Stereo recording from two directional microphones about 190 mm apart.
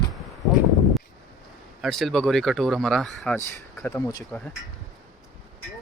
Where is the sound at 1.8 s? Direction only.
Centre (ahead or behind).